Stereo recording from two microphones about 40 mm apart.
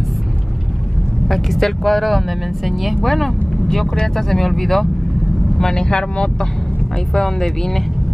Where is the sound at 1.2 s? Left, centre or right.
Centre.